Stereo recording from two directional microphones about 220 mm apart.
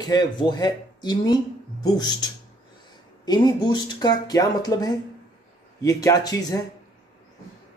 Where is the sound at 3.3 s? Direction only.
15° left (ahead or behind).